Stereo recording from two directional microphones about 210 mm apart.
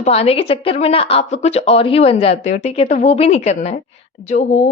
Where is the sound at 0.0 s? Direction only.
30° left (ahead or behind).